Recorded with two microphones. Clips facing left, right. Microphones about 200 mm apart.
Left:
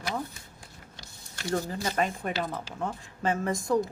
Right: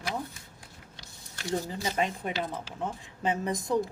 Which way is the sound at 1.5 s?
15° right (ahead or behind).